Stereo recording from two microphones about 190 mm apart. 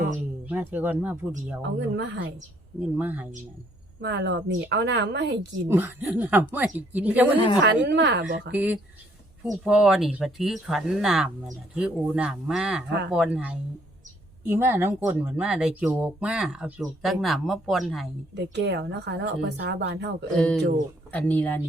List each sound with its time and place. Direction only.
0.4 s speech: 10° right (ahead or behind)
1.6 s speech: 65° right (ahead or behind)
2.8 s a woman's voice: 10° right (ahead or behind)
4.0 s speech: 65° right (ahead or behind)
5.6 s a woman's voice: 10° right (ahead or behind)
7.6 s speech: 65° right (ahead or behind)
8.5 s a woman's voice: 10° right (ahead or behind)
18.3 s speech: 65° right (ahead or behind)
21.1 s speech: 10° left (ahead or behind)